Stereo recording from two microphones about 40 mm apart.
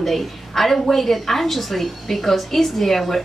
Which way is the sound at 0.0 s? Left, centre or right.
Centre.